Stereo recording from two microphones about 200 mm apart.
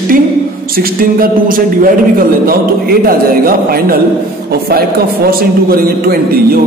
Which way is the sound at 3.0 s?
50° right (ahead or behind).